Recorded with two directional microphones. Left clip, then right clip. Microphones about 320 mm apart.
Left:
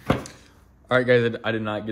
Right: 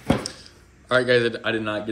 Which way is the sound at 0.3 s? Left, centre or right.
Centre.